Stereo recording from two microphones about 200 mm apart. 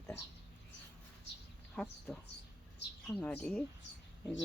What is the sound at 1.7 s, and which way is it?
Speech, 5° left (ahead or behind).